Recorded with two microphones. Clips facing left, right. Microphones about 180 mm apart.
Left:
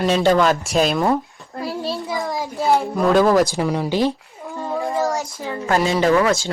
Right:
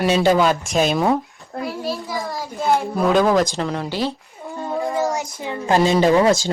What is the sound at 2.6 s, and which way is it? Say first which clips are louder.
Speech: left 1 dB; centre (ahead or behind).